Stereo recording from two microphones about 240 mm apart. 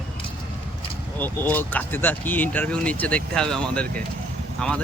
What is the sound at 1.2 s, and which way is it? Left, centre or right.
Speech, centre.